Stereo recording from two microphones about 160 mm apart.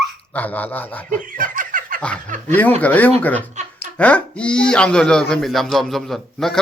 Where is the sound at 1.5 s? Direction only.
60° right (ahead or behind).